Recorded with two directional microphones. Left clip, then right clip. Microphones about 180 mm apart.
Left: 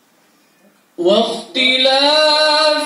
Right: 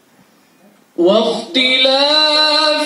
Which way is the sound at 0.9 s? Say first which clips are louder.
Right 2 dB; 45° right (ahead or behind).